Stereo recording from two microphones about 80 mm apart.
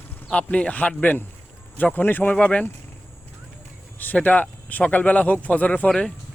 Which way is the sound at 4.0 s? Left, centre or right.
Left.